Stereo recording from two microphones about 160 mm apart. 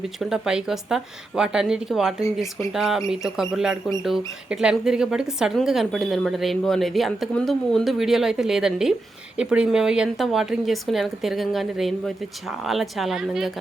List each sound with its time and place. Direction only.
0.2 s speech: 5° right (ahead or behind)
2.2 s speech: 20° left (ahead or behind)
2.7 s speech: centre (ahead or behind)